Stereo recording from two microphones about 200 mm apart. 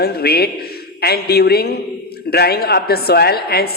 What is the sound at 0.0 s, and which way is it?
Speech, 50° left (ahead or behind).